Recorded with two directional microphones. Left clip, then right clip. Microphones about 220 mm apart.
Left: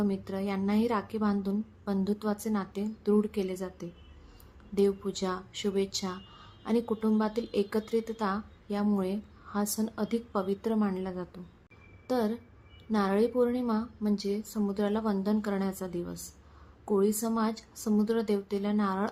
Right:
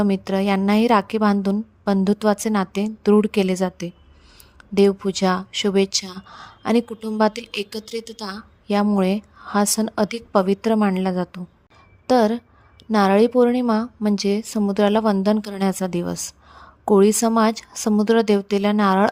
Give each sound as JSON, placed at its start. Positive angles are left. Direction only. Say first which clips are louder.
{"t": 0.0, "sound": "a woman's voice", "louder": "right 12 dB", "side_deg": -40}
{"t": 7.7, "sound": "a woman's voice", "louder": "even", "side_deg": 0}
{"t": 7.9, "sound": "a woman's voice", "louder": "right 1 dB", "side_deg": -40}